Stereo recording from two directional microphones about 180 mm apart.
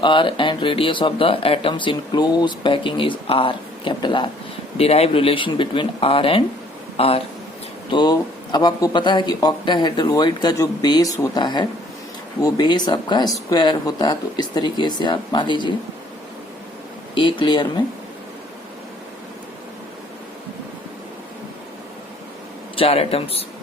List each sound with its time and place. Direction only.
0.0 s speech: 25° left (ahead or behind)
17.2 s speech: 25° left (ahead or behind)
22.7 s speech: 30° left (ahead or behind)